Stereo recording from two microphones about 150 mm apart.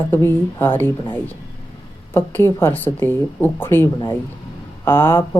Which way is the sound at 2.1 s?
15° left (ahead or behind).